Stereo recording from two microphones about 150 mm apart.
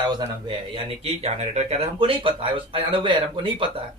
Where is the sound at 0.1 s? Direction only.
30° right (ahead or behind).